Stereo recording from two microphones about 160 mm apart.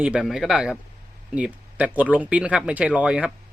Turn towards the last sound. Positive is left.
turn(degrees=-5)  # may be behind; listen again after turning